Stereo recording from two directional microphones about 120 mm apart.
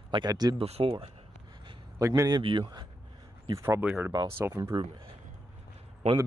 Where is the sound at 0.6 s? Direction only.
50° right (ahead or behind).